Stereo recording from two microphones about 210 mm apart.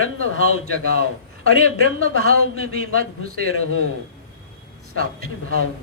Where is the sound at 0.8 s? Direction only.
45° right (ahead or behind).